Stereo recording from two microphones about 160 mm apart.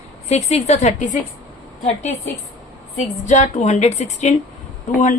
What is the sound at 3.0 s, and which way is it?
A woman's voice, 45° left (ahead or behind).